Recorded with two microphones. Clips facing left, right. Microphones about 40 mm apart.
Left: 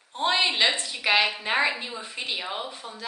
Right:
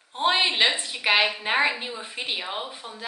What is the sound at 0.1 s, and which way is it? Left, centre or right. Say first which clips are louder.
A woman's voice: right 1 dB; centre.